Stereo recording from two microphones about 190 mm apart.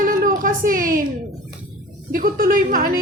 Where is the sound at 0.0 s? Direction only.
45° right (ahead or behind).